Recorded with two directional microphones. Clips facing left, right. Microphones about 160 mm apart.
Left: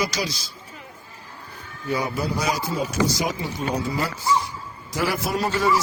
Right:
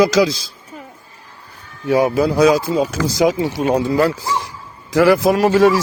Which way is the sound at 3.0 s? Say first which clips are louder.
Right 1 dB; 15° left (ahead or behind).